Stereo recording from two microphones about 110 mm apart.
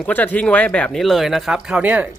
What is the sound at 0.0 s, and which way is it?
Speech, 15° left (ahead or behind).